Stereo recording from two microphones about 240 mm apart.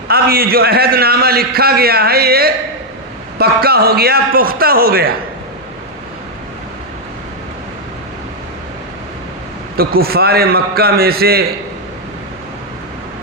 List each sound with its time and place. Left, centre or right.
0.1 s a man's voice: right
9.7 s a man's voice: right